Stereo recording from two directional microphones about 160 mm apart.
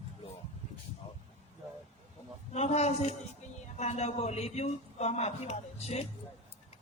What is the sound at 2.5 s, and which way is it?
A man's voice, 45° left (ahead or behind).